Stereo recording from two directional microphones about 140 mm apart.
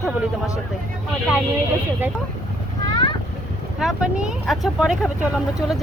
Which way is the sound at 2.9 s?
30° left (ahead or behind).